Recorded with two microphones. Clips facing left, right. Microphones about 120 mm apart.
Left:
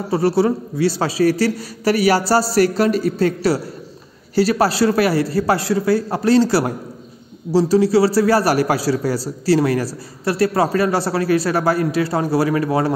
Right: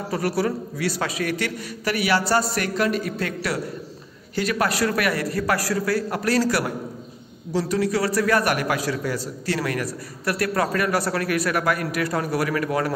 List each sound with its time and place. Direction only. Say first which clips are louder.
0.1 s a man's voice: left 8 dB; 30° left (ahead or behind)